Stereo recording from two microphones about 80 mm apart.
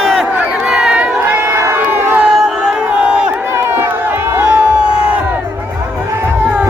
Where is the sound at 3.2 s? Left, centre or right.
Right.